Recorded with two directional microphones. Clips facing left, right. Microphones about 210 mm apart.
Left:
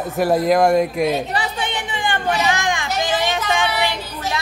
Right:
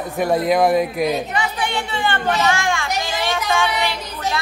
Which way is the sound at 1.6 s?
20° left (ahead or behind).